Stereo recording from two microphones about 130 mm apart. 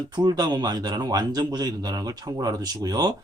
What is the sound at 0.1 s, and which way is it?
Speech, 30° right (ahead or behind).